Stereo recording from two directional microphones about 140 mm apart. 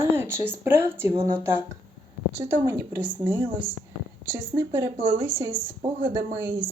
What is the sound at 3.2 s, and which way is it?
Speech, 35° right (ahead or behind).